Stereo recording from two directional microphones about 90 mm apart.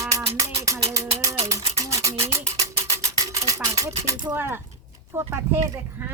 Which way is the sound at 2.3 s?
40° right (ahead or behind).